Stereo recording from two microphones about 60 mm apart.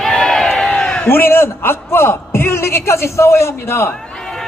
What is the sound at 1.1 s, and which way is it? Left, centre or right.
A man's voice, left.